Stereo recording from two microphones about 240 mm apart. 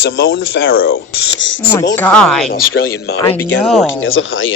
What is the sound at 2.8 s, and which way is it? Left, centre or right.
Speech, left.